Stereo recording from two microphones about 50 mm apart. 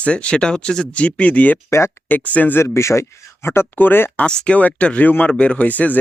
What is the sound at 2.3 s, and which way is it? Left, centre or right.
Speech, left.